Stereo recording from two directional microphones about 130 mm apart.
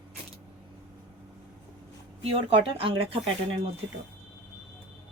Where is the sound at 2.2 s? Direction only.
45° right (ahead or behind).